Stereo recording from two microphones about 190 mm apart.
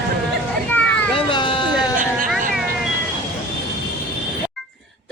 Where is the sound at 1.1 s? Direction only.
25° left (ahead or behind).